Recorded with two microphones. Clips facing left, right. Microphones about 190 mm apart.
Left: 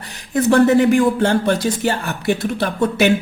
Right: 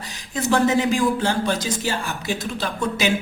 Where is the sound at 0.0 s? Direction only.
60° left (ahead or behind).